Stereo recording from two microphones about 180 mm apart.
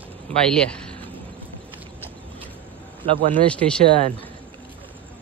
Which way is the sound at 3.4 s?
5° left (ahead or behind).